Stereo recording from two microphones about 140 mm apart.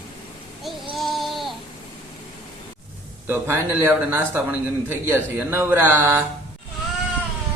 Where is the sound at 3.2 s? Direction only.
15° right (ahead or behind).